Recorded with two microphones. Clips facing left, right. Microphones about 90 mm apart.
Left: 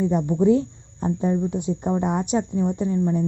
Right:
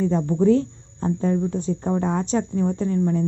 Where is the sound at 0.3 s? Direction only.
15° left (ahead or behind).